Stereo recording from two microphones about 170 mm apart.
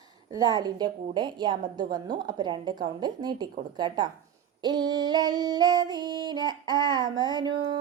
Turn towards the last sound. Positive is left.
turn(degrees=-25)  # may be behind; listen again after turning